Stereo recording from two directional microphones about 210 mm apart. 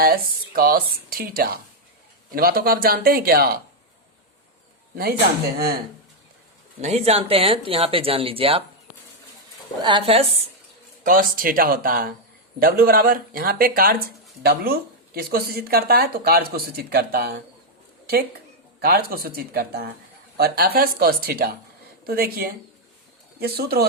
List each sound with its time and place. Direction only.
0.0 s speech: 45° right (ahead or behind)
6.8 s speech: 30° right (ahead or behind)
9.8 s speech: 25° right (ahead or behind)
11.0 s speech: 40° right (ahead or behind)
18.8 s speech: 45° right (ahead or behind)